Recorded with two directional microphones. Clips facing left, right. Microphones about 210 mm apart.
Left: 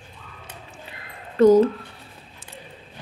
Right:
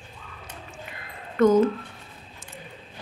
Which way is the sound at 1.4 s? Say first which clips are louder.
Left 4 dB; 35° left (ahead or behind).